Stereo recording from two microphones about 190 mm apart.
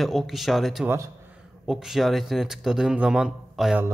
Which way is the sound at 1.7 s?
Centre (ahead or behind).